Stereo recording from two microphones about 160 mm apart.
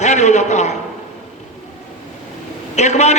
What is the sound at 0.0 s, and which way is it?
Speech, 45° left (ahead or behind).